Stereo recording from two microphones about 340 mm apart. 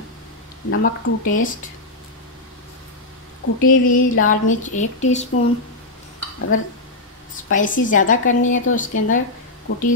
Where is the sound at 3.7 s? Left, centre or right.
Left.